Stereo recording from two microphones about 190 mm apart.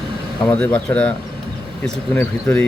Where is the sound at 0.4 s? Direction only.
5° left (ahead or behind).